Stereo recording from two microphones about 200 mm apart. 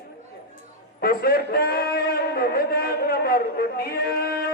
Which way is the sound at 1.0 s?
50° left (ahead or behind).